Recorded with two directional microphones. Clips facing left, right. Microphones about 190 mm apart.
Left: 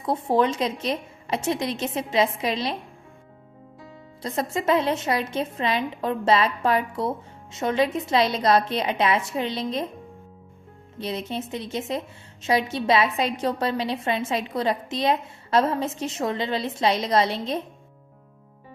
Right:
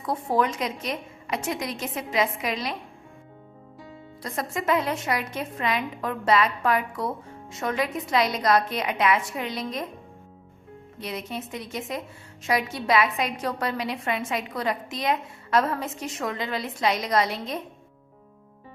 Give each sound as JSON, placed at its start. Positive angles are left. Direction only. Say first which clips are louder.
{"t": 0.0, "sound": "a woman's voice", "louder": "left 3 dB", "side_deg": 25}
{"t": 4.2, "sound": "a woman's voice", "louder": "left 4 dB", "side_deg": 25}
{"t": 10.9, "sound": "a woman's voice", "louder": "left 4 dB", "side_deg": 30}